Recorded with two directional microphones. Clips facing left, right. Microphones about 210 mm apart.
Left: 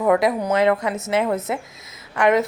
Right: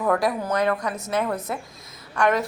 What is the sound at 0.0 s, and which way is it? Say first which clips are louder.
A woman's voice: left 4 dB; 20° left (ahead or behind).